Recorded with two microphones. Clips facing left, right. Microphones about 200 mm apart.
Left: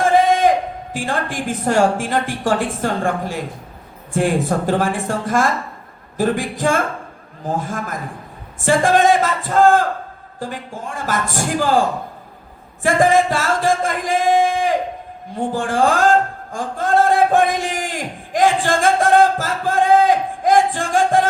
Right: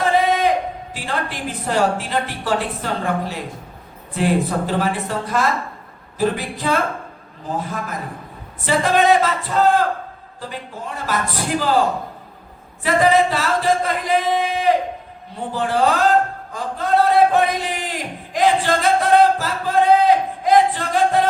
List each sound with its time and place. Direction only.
0.0 s a sound: 45° left (ahead or behind)
0.9 s a woman's voice: 45° left (ahead or behind)
12.8 s music: 45° left (ahead or behind)